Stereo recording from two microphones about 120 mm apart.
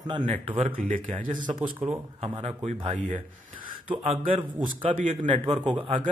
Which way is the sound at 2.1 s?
55° right (ahead or behind).